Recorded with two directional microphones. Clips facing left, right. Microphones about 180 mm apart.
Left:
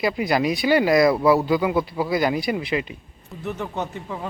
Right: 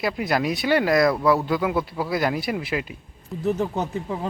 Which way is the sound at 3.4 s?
35° right (ahead or behind).